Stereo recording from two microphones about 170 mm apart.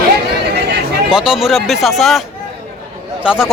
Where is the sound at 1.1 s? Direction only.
5° right (ahead or behind).